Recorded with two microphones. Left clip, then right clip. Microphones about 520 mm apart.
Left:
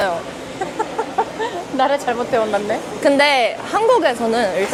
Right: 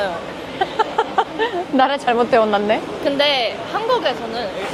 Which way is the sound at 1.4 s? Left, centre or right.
Right.